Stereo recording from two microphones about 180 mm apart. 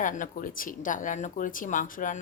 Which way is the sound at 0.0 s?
45° left (ahead or behind).